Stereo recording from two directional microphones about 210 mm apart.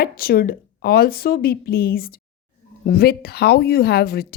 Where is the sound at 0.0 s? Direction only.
45° left (ahead or behind).